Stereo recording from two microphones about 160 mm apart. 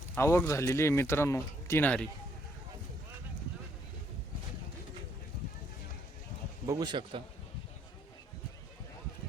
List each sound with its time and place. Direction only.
0.2 s speech: 15° left (ahead or behind)
6.7 s a man's voice: 25° right (ahead or behind)